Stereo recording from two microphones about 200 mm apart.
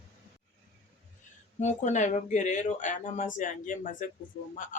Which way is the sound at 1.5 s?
35° left (ahead or behind).